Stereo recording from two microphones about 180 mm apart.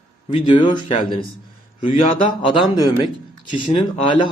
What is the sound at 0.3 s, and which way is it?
A man's voice, 25° left (ahead or behind).